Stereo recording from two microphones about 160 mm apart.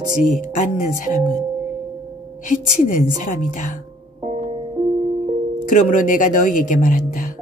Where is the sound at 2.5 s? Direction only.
55° left (ahead or behind).